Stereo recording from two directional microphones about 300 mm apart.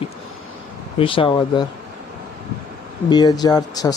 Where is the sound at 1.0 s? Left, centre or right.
Centre.